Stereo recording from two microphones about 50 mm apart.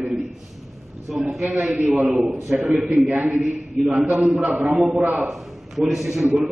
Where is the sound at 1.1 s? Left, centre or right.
Centre.